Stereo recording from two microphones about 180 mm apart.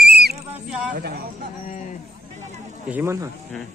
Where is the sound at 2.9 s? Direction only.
10° right (ahead or behind).